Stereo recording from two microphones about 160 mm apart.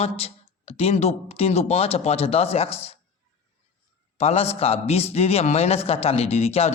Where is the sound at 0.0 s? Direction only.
40° left (ahead or behind).